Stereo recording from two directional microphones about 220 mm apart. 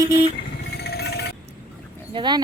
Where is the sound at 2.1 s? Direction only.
20° right (ahead or behind).